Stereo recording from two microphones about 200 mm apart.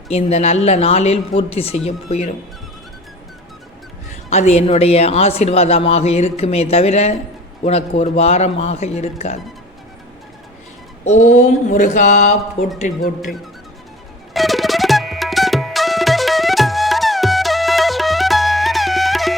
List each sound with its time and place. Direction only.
0.1 s speech: 30° left (ahead or behind)
4.3 s speech: 35° left (ahead or behind)
11.3 s speech: 40° left (ahead or behind)
14.3 s music: centre (ahead or behind)